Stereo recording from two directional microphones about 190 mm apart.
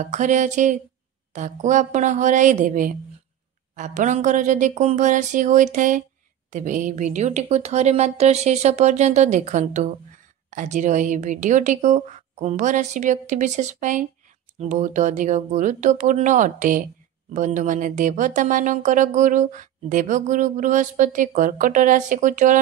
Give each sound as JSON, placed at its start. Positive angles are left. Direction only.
{"t": 0.0, "sound": "a woman's voice", "side_deg": -40}